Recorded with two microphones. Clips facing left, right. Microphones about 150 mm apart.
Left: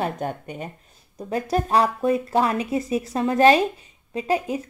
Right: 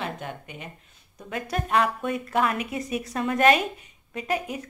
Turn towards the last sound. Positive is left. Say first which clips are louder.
# left 5 dB
turn(degrees=30)  # may be behind; listen again after turning